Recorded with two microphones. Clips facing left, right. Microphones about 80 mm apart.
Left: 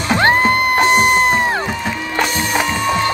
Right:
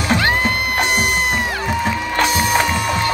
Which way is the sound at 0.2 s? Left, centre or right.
Left.